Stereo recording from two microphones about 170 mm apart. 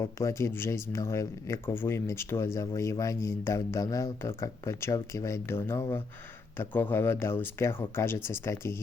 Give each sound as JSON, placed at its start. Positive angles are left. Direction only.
{"t": 0.0, "sound": "speech", "side_deg": 15}